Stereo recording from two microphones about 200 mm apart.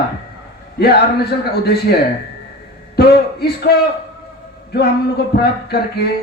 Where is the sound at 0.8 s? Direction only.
50° left (ahead or behind).